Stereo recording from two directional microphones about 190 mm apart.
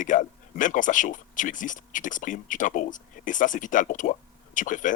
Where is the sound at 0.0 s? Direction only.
45° left (ahead or behind).